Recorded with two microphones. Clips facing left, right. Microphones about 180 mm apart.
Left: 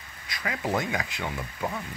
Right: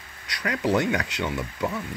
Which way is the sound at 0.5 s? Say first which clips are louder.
Right 5 dB; 75° right (ahead or behind).